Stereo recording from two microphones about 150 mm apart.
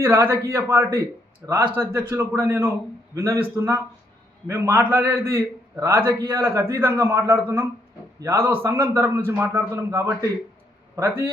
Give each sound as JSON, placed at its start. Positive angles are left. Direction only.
{"t": 0.0, "sound": "a man's voice", "side_deg": -15}